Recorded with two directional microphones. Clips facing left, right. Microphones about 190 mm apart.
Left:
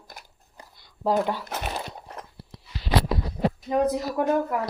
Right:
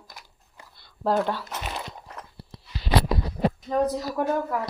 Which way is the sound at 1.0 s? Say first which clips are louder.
Even; 10° left (ahead or behind).